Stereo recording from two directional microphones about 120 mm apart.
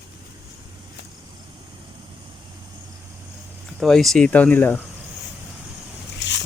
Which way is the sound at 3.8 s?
Centre (ahead or behind).